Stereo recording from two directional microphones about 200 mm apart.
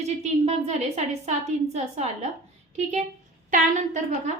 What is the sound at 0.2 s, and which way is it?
A woman's voice, 30° right (ahead or behind).